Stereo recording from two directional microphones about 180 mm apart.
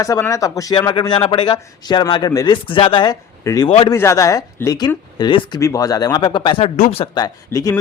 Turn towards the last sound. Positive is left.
turn(degrees=20)  # may be behind; listen again after turning